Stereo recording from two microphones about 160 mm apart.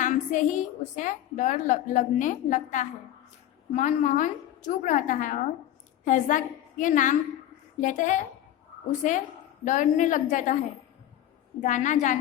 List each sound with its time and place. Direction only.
0.0 s a woman's voice: 50° left (ahead or behind)
11.6 s a woman's voice: 50° left (ahead or behind)